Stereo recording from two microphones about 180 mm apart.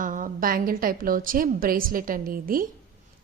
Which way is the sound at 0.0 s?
45° right (ahead or behind).